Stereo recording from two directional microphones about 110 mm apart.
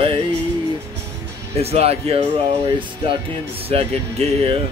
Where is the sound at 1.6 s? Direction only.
65° right (ahead or behind).